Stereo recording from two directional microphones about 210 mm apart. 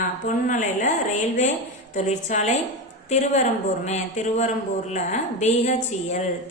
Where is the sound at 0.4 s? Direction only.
35° left (ahead or behind).